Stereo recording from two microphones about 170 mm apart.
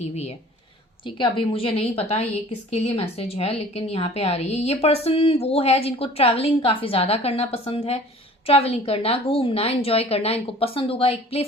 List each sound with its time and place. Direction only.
0.0 s a woman's voice: 40° left (ahead or behind)